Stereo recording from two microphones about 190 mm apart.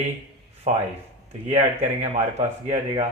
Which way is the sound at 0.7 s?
35° right (ahead or behind).